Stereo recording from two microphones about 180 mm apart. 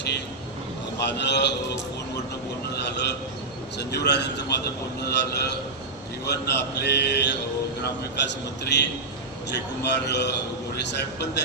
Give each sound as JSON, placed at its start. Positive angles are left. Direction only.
{"t": 0.9, "sound": "a man's voice", "side_deg": 70}
{"t": 2.7, "sound": "a sound", "side_deg": 70}
{"t": 3.8, "sound": "a man's voice", "side_deg": 70}
{"t": 8.6, "sound": "a man's voice", "side_deg": 70}